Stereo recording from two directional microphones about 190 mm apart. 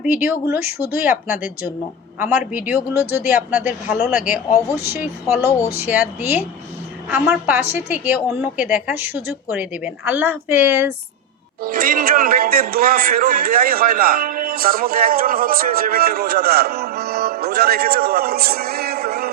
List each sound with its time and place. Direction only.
0.1 s a woman's voice: 10° right (ahead or behind)
5.5 s speech: 15° left (ahead or behind)
5.7 s a woman's voice: 10° right (ahead or behind)
11.6 s speech: 50° right (ahead or behind)